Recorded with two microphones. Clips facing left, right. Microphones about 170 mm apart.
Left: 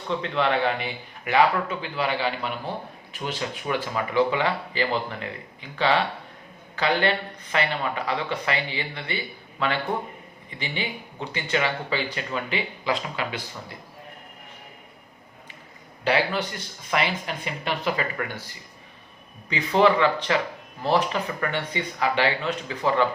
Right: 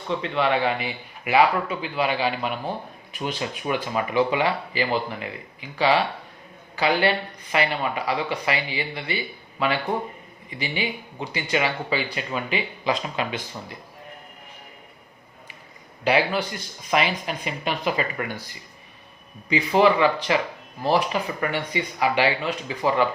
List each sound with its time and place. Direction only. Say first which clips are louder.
0.2 s speech: right 1 dB; 5° right (ahead or behind); by 13.4 s 20° right (ahead or behind)
16.0 s speech: right 2 dB; 10° right (ahead or behind)
19.5 s speech: right 1 dB; 10° right (ahead or behind)